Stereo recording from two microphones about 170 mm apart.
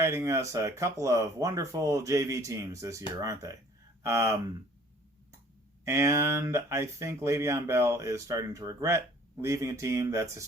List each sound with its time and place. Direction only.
0.0 s speech: 15° right (ahead or behind)
5.8 s speech: 15° right (ahead or behind)